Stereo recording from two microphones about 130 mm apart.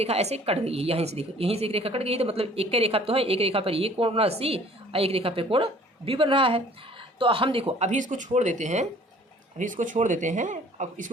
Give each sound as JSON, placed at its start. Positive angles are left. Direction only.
{"t": 0.0, "sound": "a woman's voice", "side_deg": -55}
{"t": 7.9, "sound": "speech", "side_deg": -70}
{"t": 9.6, "sound": "speech", "side_deg": -80}